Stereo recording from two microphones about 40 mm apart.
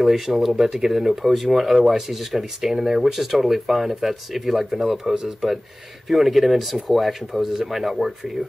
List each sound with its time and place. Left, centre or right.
0.0 s speech: centre
6.0 s speech: centre